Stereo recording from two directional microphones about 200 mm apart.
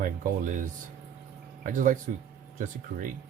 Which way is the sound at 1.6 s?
40° right (ahead or behind).